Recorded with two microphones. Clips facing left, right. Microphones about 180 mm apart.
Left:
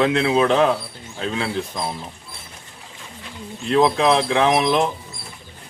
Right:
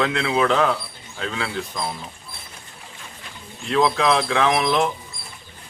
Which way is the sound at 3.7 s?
20° left (ahead or behind).